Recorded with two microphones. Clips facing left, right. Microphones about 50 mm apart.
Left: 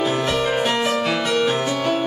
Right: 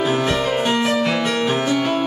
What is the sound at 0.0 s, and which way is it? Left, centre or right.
Music, centre.